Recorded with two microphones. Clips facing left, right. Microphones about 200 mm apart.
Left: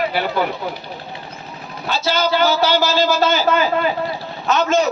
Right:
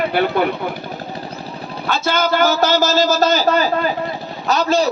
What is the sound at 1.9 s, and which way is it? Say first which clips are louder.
A man's voice: right 1 dB; 50° right (ahead or behind).